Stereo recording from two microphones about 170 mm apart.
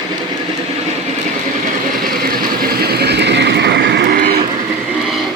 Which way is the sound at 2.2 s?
65° right (ahead or behind).